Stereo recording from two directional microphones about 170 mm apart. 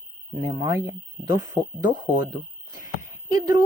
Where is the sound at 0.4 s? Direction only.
20° right (ahead or behind).